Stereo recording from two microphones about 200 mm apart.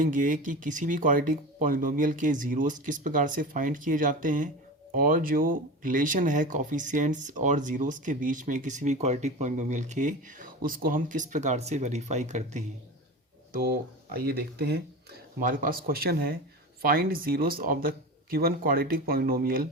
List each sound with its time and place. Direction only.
0.0 s speech: 40° right (ahead or behind)
13.5 s speech: 50° right (ahead or behind)